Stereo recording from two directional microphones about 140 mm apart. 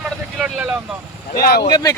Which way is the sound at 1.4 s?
90° left.